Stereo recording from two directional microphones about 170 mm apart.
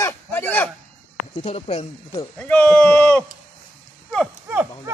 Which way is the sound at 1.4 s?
35° left (ahead or behind).